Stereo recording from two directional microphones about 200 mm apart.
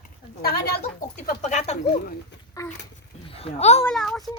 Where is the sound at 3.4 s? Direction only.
30° left (ahead or behind).